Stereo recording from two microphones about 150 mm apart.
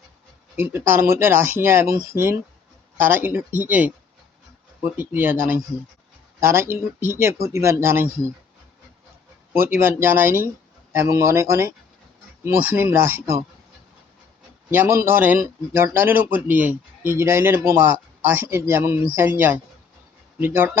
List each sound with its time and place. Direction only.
0.5 s speech: 15° right (ahead or behind)
9.5 s speech: 15° right (ahead or behind)
14.7 s speech: 15° right (ahead or behind)